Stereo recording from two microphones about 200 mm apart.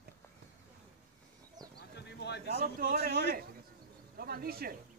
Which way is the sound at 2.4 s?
45° right (ahead or behind).